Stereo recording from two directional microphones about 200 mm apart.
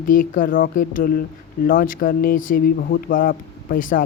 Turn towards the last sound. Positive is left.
turn(degrees=45)  # may be behind; listen again after turning